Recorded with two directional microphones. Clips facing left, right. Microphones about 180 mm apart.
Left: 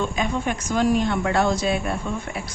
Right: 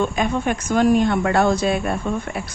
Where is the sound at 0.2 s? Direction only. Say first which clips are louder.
Right 3 dB; 55° right (ahead or behind).